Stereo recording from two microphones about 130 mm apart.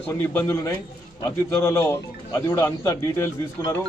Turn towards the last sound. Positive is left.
turn(degrees=20)  # may be behind; listen again after turning